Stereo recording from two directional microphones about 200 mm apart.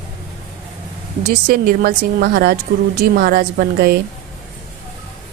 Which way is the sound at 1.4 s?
45° right (ahead or behind).